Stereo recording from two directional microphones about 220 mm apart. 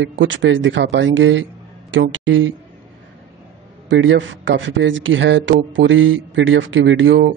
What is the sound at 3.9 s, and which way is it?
A man's voice, 55° right (ahead or behind).